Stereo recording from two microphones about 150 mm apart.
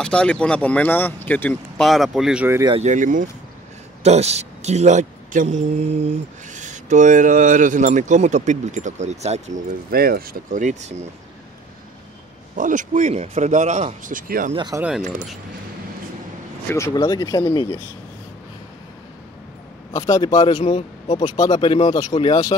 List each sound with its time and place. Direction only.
0.0 s speech: 5° left (ahead or behind)
1.9 s speech: centre (ahead or behind)
2.8 s speech: 55° right (ahead or behind)
4.0 s a man's voice: 45° right (ahead or behind)
9.8 s speech: 80° right; by 10.9 s 55° right (ahead or behind)
12.5 s speech: 60° right (ahead or behind)
14.5 s speech: 30° right (ahead or behind)
14.8 s speech: 5° right (ahead or behind)
16.6 s a man's voice: 20° left (ahead or behind)
19.9 s a man's voice: 25° left (ahead or behind)